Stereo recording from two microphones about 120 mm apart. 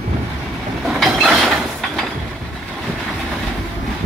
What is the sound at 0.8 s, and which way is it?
Train, centre (ahead or behind).